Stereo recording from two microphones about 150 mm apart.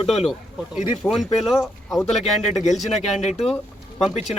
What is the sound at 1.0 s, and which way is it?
Speech, centre (ahead or behind).